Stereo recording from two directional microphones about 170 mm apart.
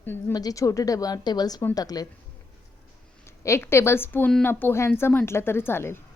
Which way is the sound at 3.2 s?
15° left (ahead or behind).